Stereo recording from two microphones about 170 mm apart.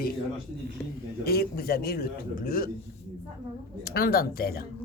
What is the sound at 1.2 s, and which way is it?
A man's voice, 65° left (ahead or behind).